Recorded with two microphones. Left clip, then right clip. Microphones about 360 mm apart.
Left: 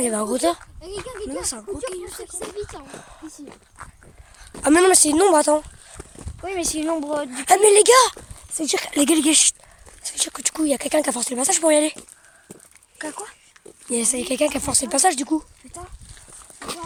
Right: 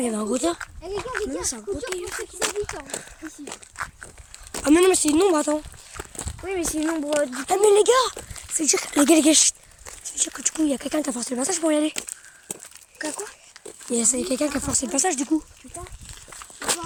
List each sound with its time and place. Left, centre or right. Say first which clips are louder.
0.0 s speech: left 3 dB; centre
1.4 s speech: even; centre
2.0 s speech: right 5 dB; right
4.6 s speech: left 2 dB; centre
13.0 s speech: right 1 dB; centre